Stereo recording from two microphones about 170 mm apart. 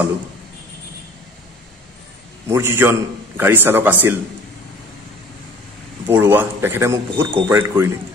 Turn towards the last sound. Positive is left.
turn(degrees=-15)  # may be behind; listen again after turning